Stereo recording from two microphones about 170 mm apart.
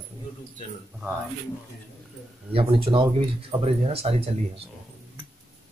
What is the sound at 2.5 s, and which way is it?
Speech, 30° right (ahead or behind).